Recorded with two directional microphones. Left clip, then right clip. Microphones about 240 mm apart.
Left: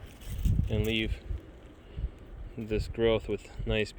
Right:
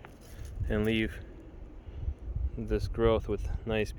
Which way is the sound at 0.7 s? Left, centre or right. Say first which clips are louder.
Right 1 dB; centre.